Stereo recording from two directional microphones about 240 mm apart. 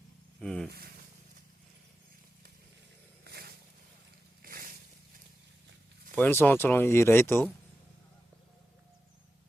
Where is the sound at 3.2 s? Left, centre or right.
Right.